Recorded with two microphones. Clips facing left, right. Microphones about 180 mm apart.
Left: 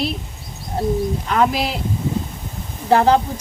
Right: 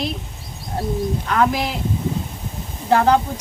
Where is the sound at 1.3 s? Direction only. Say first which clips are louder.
Left 1 dB; 10° left (ahead or behind).